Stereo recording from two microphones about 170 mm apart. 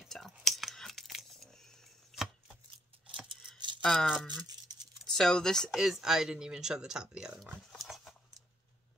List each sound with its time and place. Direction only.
0.0 s whispering: centre (ahead or behind)
3.5 s rattle: 25° right (ahead or behind)
3.8 s speech: centre (ahead or behind)
7.5 s a sound: centre (ahead or behind)